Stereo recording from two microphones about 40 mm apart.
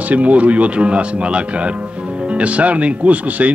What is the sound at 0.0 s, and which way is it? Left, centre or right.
Speech, right.